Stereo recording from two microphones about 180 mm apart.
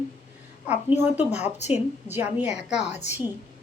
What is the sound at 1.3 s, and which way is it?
Speech, 40° left (ahead or behind).